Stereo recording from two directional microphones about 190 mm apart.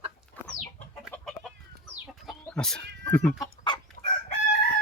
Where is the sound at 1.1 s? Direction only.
Centre (ahead or behind).